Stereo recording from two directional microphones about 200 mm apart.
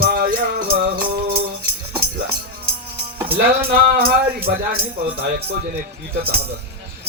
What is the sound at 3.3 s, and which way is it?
Music, 50° right (ahead or behind).